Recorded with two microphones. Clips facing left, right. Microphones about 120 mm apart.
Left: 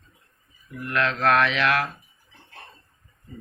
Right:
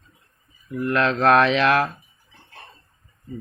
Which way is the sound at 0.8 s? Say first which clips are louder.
Right 4 dB; 30° right (ahead or behind).